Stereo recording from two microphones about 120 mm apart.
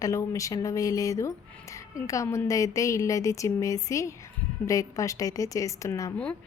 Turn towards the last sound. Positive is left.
turn(degrees=25)  # may be behind; listen again after turning